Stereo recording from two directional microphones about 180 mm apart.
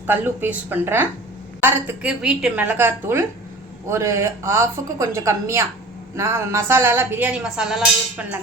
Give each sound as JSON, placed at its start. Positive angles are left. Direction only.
{"t": 0.1, "sound": "a woman's voice", "side_deg": -10}